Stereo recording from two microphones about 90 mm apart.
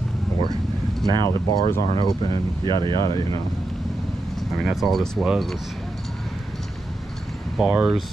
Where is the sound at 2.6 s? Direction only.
65° right (ahead or behind).